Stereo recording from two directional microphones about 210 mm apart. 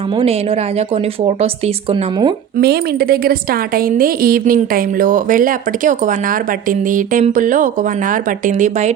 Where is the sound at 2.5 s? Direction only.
50° right (ahead or behind).